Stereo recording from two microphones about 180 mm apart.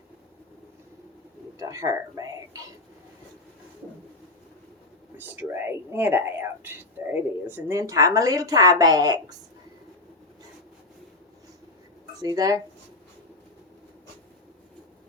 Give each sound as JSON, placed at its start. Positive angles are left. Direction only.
{"t": 1.5, "sound": "speech", "side_deg": -20}
{"t": 5.1, "sound": "speech", "side_deg": -10}
{"t": 12.2, "sound": "speech", "side_deg": -20}